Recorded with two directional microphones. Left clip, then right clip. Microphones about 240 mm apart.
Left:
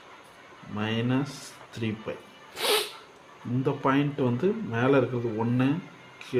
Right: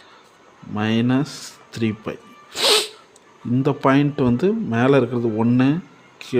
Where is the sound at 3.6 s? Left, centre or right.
Right.